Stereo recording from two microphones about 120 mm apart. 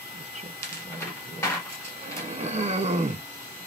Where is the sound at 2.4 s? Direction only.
70° right (ahead or behind).